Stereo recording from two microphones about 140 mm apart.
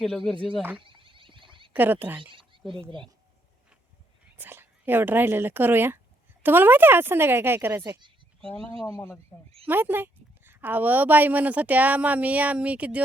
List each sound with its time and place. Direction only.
0.0 s speech: 5° left (ahead or behind)
0.8 s a sound: 35° right (ahead or behind)
1.7 s a woman's voice: 15° right (ahead or behind)
2.1 s speech: 35° right (ahead or behind)
4.4 s a woman's voice: 15° right (ahead or behind)
7.8 s speech: 30° right (ahead or behind)
8.4 s speech: 5° left (ahead or behind)
8.9 s speech: 15° left (ahead or behind)
9.6 s a woman's voice: 15° right (ahead or behind)